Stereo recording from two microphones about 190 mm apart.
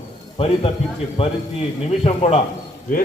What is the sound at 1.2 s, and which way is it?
A man's voice, 30° left (ahead or behind).